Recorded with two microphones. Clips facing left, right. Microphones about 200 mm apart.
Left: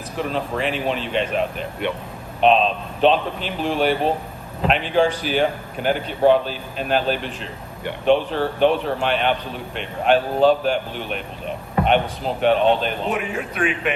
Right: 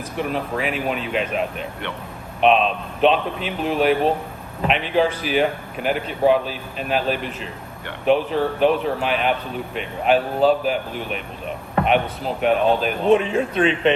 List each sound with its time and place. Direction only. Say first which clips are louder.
0.2 s speech: even; 5° right (ahead or behind)
13.1 s speech: right 5 dB; 30° right (ahead or behind)